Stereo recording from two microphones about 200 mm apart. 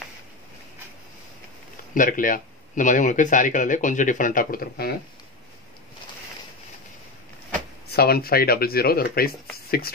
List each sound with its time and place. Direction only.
2.0 s speech: 40° left (ahead or behind)
7.9 s speech: 50° left (ahead or behind)